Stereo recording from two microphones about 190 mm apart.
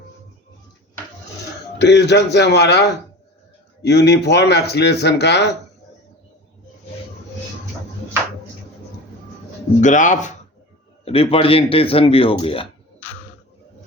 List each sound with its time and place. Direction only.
1.8 s speech: 65° left (ahead or behind)
3.8 s speech: 60° left (ahead or behind)
9.8 s speech: 40° left (ahead or behind)